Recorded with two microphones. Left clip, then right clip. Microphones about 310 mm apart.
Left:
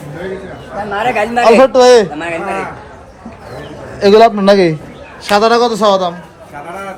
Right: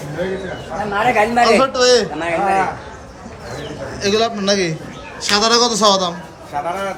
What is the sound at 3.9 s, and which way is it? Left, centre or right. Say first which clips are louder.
A man's voice: left 11 dB; centre.